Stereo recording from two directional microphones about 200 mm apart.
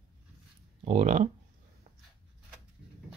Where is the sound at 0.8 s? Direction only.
35° right (ahead or behind).